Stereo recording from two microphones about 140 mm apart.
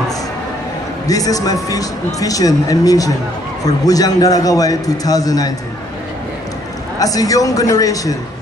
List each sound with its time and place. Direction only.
1.0 s a man's voice: 25° left (ahead or behind)
7.0 s a man's voice: 25° left (ahead or behind)